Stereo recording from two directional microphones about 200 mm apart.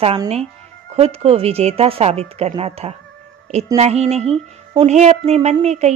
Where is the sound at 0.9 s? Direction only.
30° right (ahead or behind).